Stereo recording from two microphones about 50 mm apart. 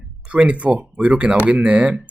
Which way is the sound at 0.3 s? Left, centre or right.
Right.